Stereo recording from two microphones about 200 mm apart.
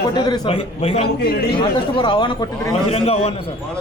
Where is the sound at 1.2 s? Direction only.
50° left (ahead or behind).